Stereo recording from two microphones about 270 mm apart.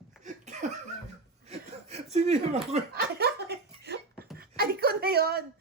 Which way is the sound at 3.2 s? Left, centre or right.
Right.